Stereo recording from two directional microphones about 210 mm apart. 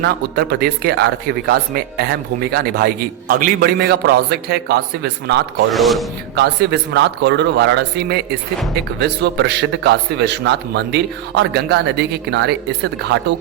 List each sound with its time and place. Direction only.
0.0 s a man's voice: 50° right (ahead or behind)
5.7 s a man's voice: centre (ahead or behind)
6.3 s a man's voice: 50° right (ahead or behind)